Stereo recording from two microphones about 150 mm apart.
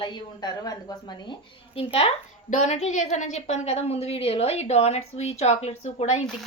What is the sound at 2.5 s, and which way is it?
A woman's voice, 50° left (ahead or behind).